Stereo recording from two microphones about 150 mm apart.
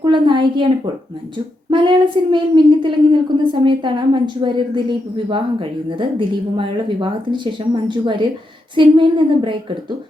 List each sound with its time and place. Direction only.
0.0 s speech: 30° right (ahead or behind)
1.7 s a woman's voice: 35° right (ahead or behind)